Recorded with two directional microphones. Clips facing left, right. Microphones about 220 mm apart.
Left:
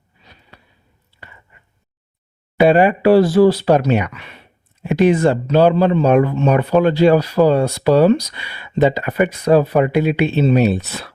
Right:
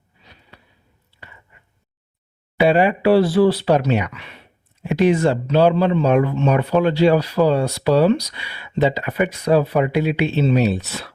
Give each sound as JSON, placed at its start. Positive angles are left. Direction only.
{"t": 2.6, "sound": "speech", "side_deg": 50}